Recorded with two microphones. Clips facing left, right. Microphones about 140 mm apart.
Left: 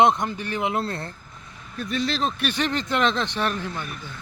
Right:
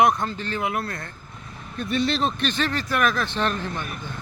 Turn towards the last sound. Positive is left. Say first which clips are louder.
# right 1 dB
turn(degrees=10)  # may be behind; listen again after turning